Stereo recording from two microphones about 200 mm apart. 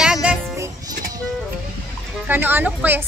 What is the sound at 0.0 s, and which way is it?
Music, 5° right (ahead or behind).